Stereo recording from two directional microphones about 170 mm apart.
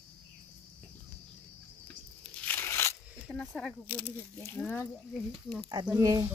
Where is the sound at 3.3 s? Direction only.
5° left (ahead or behind).